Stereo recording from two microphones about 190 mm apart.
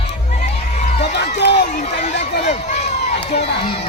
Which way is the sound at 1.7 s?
40° left (ahead or behind).